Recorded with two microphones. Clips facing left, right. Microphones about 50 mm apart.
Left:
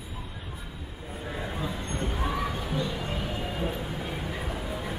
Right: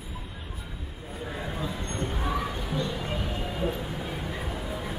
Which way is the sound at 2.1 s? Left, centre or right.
Centre.